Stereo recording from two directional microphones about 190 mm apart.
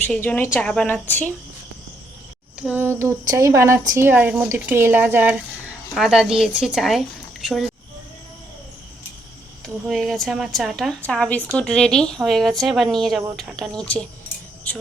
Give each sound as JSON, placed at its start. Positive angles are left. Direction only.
{"t": 0.1, "sound": "a woman's voice", "side_deg": 10}
{"t": 2.6, "sound": "a woman's voice", "side_deg": -10}
{"t": 9.6, "sound": "a woman's voice", "side_deg": 0}